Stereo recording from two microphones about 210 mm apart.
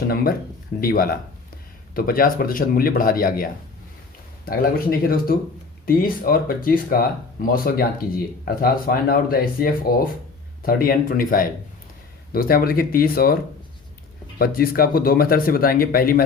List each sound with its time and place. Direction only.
0.8 s speech: 45° left (ahead or behind)